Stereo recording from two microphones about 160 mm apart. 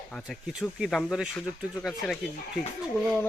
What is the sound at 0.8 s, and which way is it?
Speech, centre (ahead or behind).